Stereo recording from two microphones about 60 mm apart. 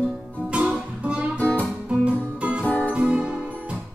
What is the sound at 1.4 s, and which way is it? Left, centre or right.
Guitar, left.